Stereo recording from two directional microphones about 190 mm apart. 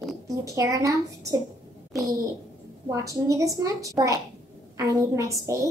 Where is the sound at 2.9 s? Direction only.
15° right (ahead or behind).